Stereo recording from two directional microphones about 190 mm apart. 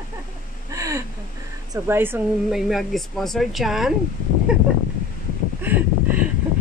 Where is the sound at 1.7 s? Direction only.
10° right (ahead or behind).